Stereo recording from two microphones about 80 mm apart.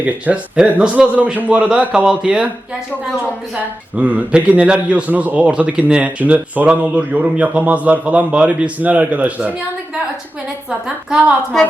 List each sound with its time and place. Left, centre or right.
0.0 s a man's voice: centre
3.5 s a man's voice: centre
10.7 s a man's voice: centre